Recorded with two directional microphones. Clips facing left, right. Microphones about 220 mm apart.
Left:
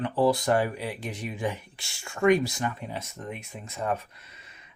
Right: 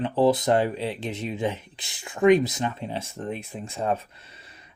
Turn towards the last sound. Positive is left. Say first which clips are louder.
# right 3 dB
turn(degrees=-30)  # may be behind; listen again after turning